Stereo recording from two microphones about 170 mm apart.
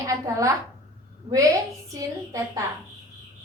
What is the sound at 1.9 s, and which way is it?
Speech, 20° right (ahead or behind).